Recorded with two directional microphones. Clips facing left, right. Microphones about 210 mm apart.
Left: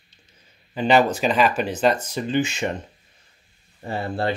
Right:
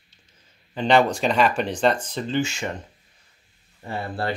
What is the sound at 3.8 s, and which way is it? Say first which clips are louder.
Speech: left 3 dB; 25° left (ahead or behind).